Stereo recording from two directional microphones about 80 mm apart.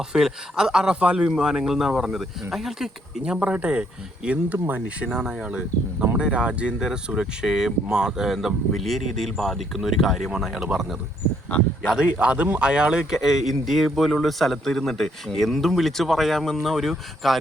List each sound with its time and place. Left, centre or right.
0.1 s a man's voice: centre
3.3 s a man's voice: centre
4.5 s speech: right
4.9 s a man's voice: centre